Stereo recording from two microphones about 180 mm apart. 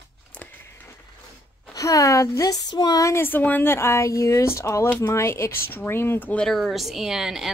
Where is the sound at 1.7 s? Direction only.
20° left (ahead or behind).